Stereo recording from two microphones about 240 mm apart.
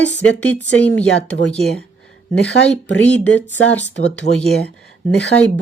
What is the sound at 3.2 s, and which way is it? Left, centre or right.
Speech, centre.